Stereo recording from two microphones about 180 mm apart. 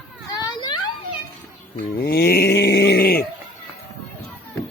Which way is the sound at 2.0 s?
60° left (ahead or behind).